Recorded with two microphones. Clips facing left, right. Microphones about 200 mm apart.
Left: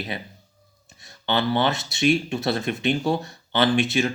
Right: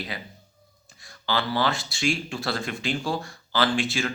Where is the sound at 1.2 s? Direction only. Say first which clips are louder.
Left 3 dB; 20° left (ahead or behind).